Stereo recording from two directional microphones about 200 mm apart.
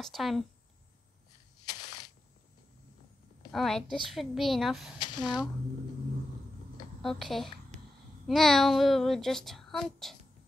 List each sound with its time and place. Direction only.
0.0 s a child's voice: centre (ahead or behind)
3.5 s a child's voice: centre (ahead or behind)
4.9 s speech: 20° left (ahead or behind)
7.0 s a child's voice: centre (ahead or behind)